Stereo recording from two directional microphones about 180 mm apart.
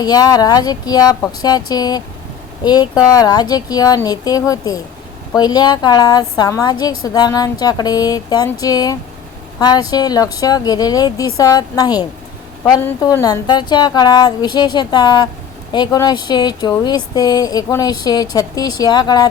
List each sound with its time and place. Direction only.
0.0 s speech: 20° left (ahead or behind)